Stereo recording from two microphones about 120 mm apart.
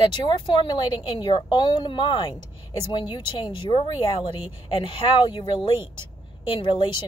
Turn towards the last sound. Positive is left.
turn(degrees=45)  # may be behind; listen again after turning